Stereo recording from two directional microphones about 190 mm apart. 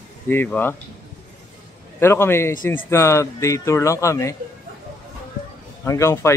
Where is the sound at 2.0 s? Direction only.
15° left (ahead or behind).